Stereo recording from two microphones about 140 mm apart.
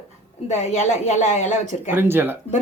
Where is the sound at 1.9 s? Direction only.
15° right (ahead or behind).